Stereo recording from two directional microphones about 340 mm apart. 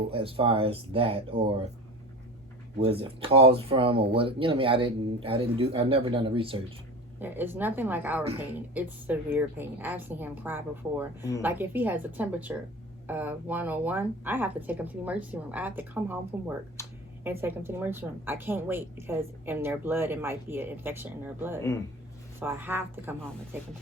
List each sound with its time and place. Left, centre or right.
0.1 s a woman's voice: centre
2.8 s a woman's voice: centre
16.8 s a sound: centre
17.2 s a woman's voice: centre